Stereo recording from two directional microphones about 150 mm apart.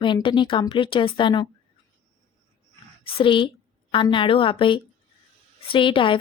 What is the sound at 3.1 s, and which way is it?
Speech, 35° left (ahead or behind).